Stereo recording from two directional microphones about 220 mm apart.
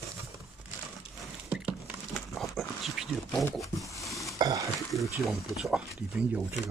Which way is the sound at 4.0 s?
Centre (ahead or behind).